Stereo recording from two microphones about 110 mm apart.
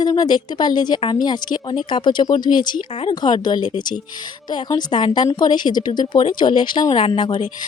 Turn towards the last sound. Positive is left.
turn(degrees=50)  # may be behind; listen again after turning